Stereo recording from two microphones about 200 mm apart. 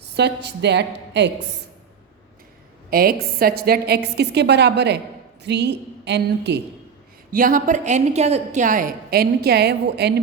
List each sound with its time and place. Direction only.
0.0 s a woman's voice: 55° right (ahead or behind)
2.9 s a woman's voice: 50° right (ahead or behind)
7.3 s a woman's voice: 45° right (ahead or behind)